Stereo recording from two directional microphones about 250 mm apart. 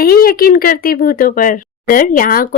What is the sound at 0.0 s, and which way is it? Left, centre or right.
Speech, left.